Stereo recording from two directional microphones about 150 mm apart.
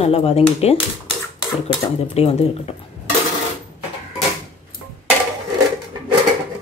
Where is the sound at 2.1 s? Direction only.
40° left (ahead or behind).